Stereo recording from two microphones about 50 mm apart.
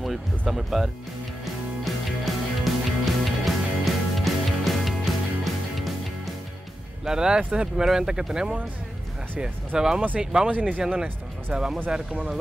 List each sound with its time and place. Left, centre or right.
0.0 s music: centre
7.1 s speech: centre
9.8 s speech: centre
10.5 s speech: right
10.8 s speech: centre